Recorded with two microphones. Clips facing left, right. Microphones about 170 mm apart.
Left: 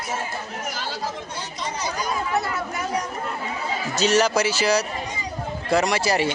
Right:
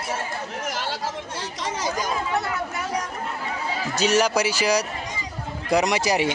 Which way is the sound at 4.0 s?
10° right (ahead or behind).